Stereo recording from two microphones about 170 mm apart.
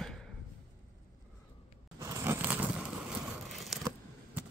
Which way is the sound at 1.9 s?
20° right (ahead or behind).